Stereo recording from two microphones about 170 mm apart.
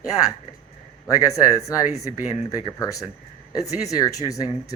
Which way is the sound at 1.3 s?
20° left (ahead or behind).